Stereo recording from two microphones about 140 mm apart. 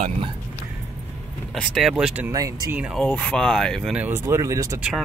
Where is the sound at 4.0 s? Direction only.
15° right (ahead or behind).